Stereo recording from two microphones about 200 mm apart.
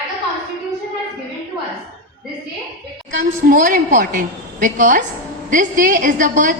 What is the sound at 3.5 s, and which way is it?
A woman's voice, 40° right (ahead or behind).